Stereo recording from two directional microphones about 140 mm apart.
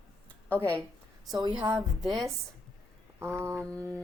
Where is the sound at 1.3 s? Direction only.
30° right (ahead or behind).